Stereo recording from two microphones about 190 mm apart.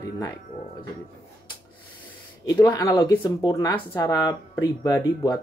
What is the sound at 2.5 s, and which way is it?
Speech, 20° left (ahead or behind).